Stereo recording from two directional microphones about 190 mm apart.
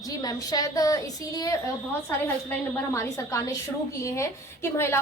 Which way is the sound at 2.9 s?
15° left (ahead or behind).